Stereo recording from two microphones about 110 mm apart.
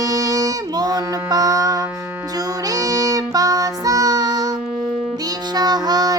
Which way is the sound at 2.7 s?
35° right (ahead or behind).